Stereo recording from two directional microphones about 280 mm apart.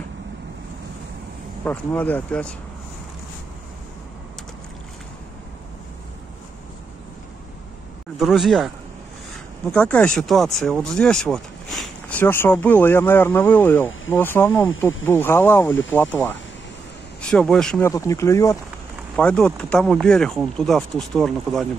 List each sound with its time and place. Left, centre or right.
1.6 s speech: centre
8.2 s speech: centre